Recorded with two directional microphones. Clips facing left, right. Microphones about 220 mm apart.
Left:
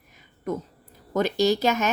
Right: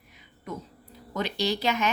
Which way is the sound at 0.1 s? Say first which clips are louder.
Left 11 dB; 45° left (ahead or behind).